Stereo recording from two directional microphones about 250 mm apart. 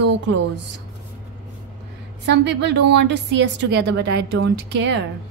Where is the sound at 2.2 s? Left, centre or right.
Right.